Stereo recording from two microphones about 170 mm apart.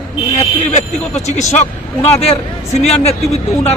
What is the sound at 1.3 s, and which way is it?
A man's voice, 45° left (ahead or behind).